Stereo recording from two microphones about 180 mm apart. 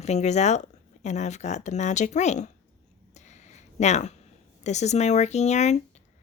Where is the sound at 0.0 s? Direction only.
40° left (ahead or behind).